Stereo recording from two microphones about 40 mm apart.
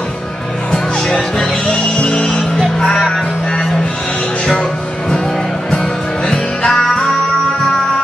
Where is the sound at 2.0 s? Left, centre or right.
Left.